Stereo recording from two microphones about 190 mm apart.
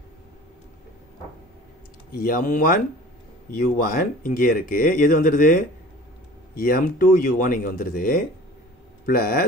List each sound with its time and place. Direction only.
2.1 s speech: 45° left (ahead or behind)